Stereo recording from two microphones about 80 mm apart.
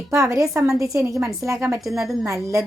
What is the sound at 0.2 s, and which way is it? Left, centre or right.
A woman's voice, right.